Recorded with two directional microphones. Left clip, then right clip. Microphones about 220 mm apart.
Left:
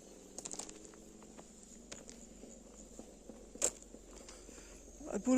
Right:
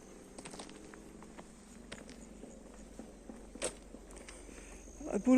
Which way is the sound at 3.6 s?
30° left (ahead or behind).